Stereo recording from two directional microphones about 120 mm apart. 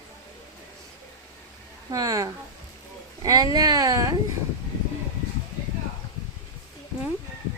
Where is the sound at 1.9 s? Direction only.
30° right (ahead or behind).